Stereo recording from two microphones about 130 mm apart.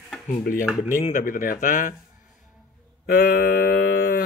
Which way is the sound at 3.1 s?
90° left.